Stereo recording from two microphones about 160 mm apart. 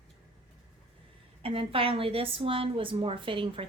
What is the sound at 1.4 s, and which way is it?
A woman's voice, 35° right (ahead or behind).